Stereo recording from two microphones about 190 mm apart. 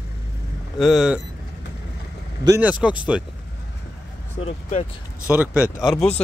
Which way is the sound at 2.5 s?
5° right (ahead or behind).